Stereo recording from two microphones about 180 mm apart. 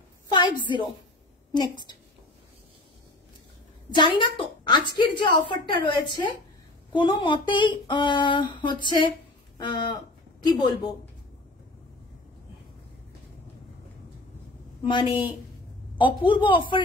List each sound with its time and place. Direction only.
0.3 s a woman's voice: 25° left (ahead or behind)
3.9 s speech: 25° left (ahead or behind)
14.9 s speech: 25° left (ahead or behind)